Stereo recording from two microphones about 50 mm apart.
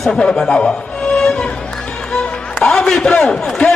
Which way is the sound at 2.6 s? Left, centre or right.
Centre.